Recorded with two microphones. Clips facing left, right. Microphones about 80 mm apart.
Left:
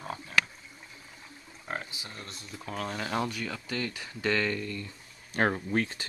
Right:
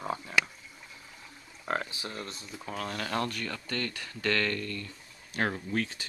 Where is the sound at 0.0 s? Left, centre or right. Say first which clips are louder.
Right 4 dB; right.